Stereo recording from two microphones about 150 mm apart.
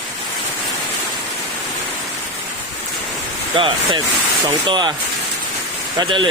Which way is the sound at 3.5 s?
35° right (ahead or behind).